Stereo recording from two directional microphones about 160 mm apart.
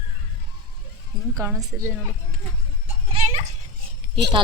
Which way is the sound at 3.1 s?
40° right (ahead or behind).